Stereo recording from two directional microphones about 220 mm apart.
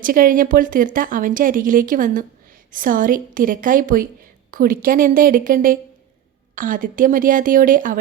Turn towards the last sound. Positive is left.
turn(degrees=-40)  # may be behind; listen again after turning